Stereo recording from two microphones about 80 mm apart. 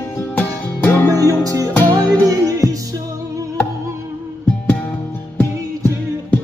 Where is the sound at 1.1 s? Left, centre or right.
Right.